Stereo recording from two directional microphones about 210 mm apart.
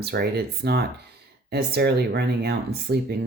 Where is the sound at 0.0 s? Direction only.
50° right (ahead or behind).